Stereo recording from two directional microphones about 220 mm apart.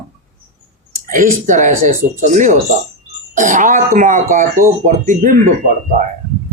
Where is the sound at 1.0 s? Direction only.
35° right (ahead or behind).